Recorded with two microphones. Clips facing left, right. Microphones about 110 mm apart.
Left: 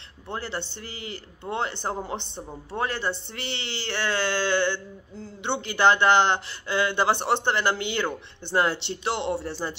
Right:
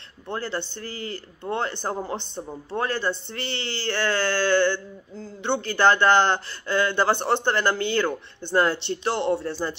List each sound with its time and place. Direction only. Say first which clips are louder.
0.3 s speech: right 3 dB; 15° left (ahead or behind)